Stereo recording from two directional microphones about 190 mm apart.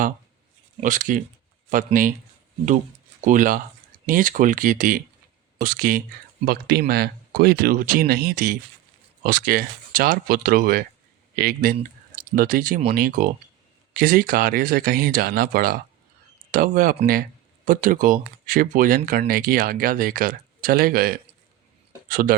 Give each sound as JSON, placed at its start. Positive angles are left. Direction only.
{"t": 0.8, "sound": "speech", "side_deg": -45}
{"t": 3.2, "sound": "speech", "side_deg": -45}